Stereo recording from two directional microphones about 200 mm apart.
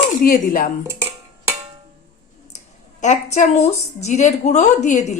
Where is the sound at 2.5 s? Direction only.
35° left (ahead or behind).